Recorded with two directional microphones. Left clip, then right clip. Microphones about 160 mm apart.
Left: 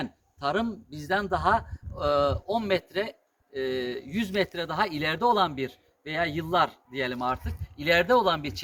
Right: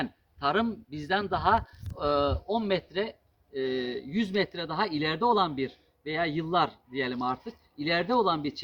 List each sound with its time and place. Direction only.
0.3 s speech: 35° left (ahead or behind)